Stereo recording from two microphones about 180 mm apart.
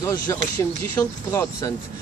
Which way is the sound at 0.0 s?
20° left (ahead or behind).